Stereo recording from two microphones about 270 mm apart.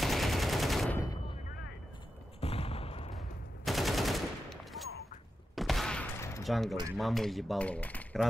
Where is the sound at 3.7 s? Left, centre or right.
Centre.